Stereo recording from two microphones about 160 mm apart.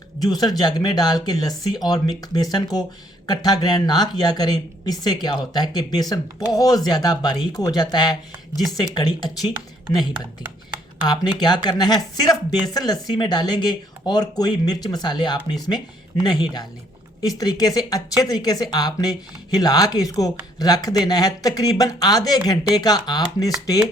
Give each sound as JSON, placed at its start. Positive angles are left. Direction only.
{"t": 0.2, "sound": "speech", "side_deg": 25}
{"t": 11.2, "sound": "speech", "side_deg": 25}